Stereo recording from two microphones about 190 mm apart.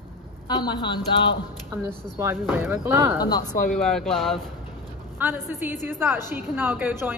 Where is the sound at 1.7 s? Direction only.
15° right (ahead or behind).